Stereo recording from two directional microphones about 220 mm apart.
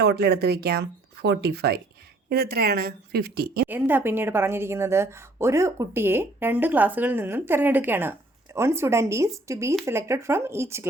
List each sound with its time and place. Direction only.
0.0 s speech: 45° right (ahead or behind)
3.7 s a woman's voice: 10° right (ahead or behind)